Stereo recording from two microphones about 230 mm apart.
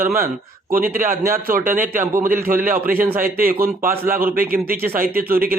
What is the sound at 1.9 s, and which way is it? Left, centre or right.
A man's voice, right.